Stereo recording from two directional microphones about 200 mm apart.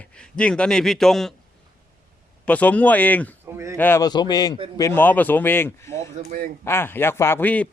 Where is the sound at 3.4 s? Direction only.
15° right (ahead or behind).